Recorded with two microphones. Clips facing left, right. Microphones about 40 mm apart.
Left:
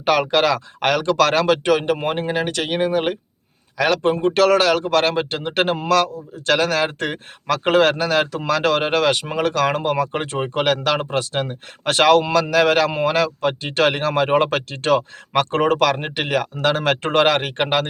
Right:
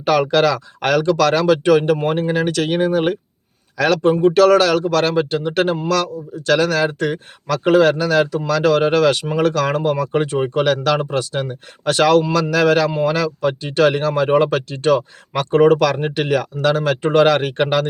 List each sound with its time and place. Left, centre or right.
0.0 s a man's voice: left
15.9 s a man's voice: left
17.2 s speech: left